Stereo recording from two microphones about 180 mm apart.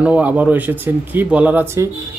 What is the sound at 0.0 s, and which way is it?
Speech, 5° right (ahead or behind).